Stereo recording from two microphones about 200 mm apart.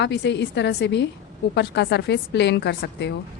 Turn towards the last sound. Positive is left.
turn(degrees=60)  # may be behind; listen again after turning